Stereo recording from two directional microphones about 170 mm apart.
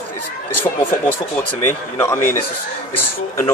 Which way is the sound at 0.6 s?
10° left (ahead or behind).